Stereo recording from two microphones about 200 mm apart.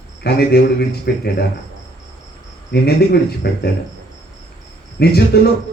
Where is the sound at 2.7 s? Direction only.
55° left (ahead or behind).